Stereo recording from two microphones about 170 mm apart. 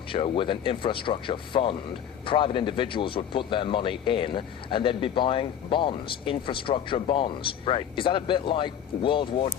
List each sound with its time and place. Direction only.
0.1 s speech: 30° left (ahead or behind)